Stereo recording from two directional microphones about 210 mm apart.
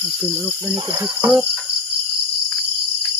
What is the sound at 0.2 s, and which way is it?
Speech, 5° right (ahead or behind).